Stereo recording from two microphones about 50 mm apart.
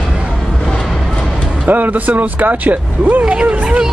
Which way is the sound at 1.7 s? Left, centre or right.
Right.